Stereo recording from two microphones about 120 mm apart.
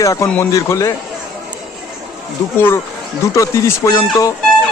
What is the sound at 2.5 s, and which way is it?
A man's voice, 20° left (ahead or behind).